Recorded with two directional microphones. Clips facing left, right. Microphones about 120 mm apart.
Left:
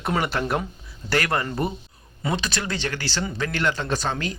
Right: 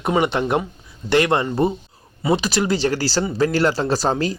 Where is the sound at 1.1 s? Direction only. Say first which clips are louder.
Right 7 dB; 25° right (ahead or behind).